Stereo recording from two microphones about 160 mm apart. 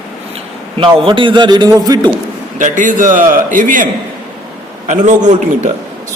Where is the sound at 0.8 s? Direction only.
30° right (ahead or behind).